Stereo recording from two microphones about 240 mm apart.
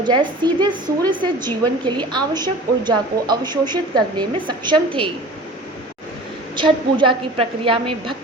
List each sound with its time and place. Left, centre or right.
0.0 s a woman's voice: centre
6.6 s a woman's voice: centre